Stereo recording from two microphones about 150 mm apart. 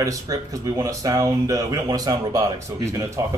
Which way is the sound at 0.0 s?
20° right (ahead or behind).